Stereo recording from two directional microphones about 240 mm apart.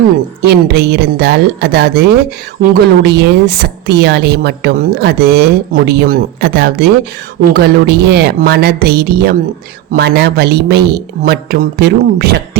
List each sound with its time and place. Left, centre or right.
0.4 s a woman's voice: right